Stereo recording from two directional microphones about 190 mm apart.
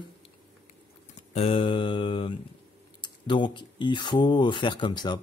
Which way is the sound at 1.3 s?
30° left (ahead or behind).